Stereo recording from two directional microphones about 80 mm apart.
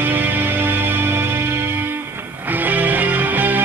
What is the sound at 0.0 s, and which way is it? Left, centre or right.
Music, right.